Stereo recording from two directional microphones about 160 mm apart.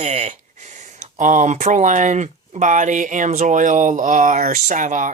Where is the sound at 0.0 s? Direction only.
45° right (ahead or behind).